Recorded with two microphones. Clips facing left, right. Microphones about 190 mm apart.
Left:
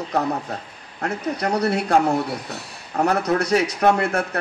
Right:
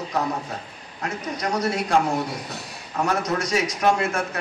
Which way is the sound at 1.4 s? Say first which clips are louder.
Left 2 dB; 60° left (ahead or behind).